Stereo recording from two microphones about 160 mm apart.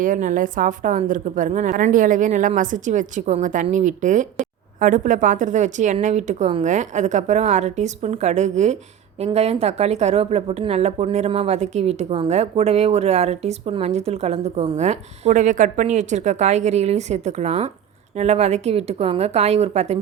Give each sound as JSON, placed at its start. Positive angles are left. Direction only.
{"t": 0.0, "sound": "a woman's voice", "side_deg": -55}